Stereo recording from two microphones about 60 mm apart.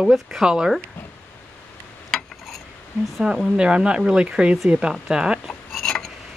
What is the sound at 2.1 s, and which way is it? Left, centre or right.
Dishes, centre.